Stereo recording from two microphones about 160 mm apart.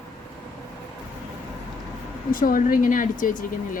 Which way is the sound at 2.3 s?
60° left (ahead or behind).